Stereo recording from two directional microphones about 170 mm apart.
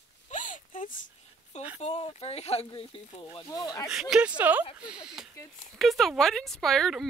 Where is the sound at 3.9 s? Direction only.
5° right (ahead or behind).